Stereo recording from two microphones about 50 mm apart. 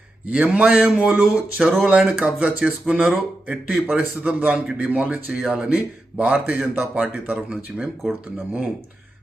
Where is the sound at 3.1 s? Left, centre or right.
Right.